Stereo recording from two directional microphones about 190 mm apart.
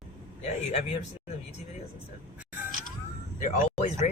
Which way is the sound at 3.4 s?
35° left (ahead or behind).